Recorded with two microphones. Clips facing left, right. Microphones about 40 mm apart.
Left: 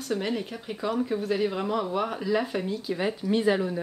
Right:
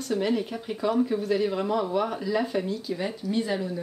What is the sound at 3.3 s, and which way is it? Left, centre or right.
Speech, left.